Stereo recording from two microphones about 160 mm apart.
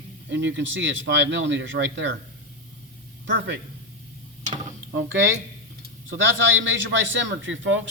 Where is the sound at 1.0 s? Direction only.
90° right.